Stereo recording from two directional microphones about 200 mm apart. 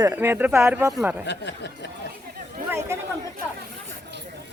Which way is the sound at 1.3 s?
60° left (ahead or behind).